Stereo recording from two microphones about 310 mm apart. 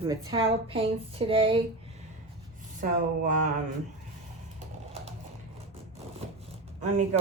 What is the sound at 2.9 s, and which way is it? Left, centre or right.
Speech, right.